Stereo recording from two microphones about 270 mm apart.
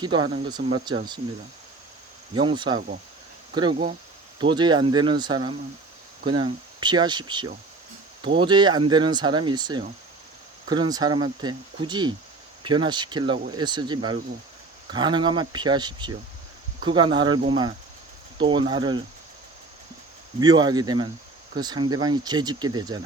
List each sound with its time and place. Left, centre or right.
0.0 s speech: centre
2.3 s speech: centre
20.4 s speech: centre